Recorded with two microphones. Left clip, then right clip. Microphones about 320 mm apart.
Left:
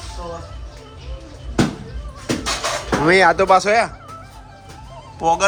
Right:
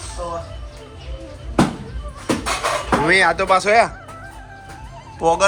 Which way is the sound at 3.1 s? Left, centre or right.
Left.